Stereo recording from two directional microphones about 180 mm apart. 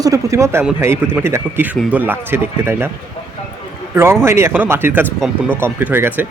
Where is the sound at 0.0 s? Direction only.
20° right (ahead or behind).